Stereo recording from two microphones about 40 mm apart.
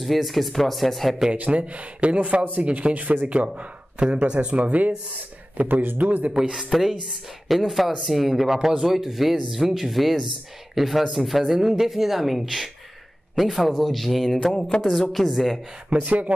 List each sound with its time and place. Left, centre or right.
0.0 s speech: centre
1.3 s speech: right
2.9 s speech: right
4.0 s speech: right
6.7 s speech: centre
16.1 s speech: right